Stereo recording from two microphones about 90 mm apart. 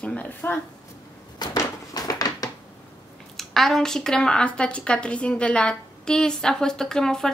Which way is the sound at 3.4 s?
5° left (ahead or behind).